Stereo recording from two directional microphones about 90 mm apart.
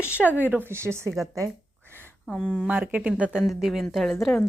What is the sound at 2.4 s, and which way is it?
Speech, 10° right (ahead or behind).